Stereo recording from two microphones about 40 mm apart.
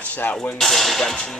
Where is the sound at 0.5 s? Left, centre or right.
Centre.